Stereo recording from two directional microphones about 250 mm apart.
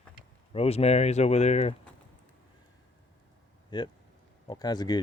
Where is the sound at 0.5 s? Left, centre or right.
Left.